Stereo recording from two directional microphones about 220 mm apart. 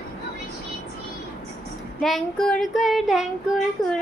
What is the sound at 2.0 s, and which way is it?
Child singing, centre (ahead or behind).